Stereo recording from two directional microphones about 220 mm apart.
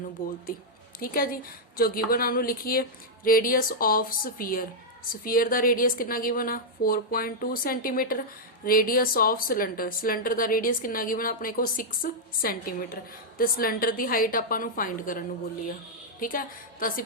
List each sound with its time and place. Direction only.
0.2 s speech: 40° left (ahead or behind)
16.2 s speech: 40° left (ahead or behind)